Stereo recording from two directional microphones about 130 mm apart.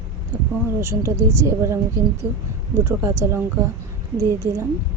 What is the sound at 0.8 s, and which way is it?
A woman's voice, 20° right (ahead or behind).